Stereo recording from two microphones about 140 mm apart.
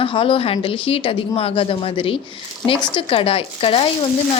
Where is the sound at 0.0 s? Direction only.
40° left (ahead or behind).